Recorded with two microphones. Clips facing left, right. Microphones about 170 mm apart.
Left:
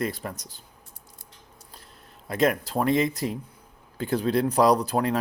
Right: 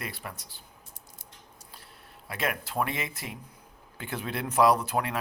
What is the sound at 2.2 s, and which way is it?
Speech, 40° left (ahead or behind).